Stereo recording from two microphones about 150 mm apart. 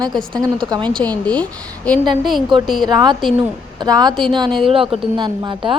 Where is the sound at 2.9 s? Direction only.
30° right (ahead or behind).